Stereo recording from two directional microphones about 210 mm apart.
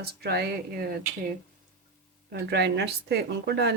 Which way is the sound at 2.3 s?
50° right (ahead or behind).